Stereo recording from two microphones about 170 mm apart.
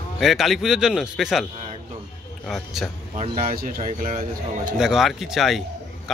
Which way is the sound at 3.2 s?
50° right (ahead or behind).